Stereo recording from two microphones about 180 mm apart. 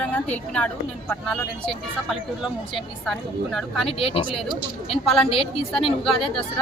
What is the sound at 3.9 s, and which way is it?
Speech, 30° left (ahead or behind).